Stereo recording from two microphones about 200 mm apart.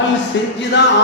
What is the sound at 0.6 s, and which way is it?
Speech, 60° left (ahead or behind).